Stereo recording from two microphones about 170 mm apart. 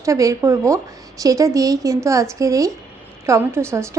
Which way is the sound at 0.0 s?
20° right (ahead or behind).